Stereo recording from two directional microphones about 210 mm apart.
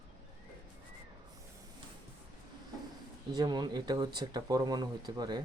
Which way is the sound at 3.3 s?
20° right (ahead or behind).